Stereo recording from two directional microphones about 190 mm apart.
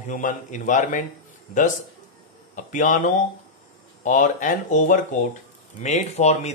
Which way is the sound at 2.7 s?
40° left (ahead or behind).